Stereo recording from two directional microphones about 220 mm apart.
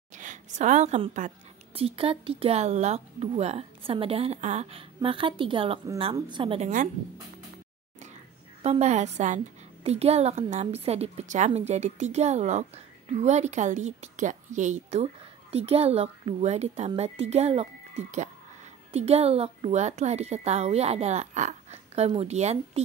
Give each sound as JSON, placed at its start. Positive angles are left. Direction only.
{"t": 0.1, "sound": "a woman's voice", "side_deg": -35}
{"t": 8.6, "sound": "a woman's voice", "side_deg": -30}